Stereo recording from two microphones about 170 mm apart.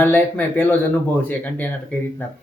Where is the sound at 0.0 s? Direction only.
10° left (ahead or behind).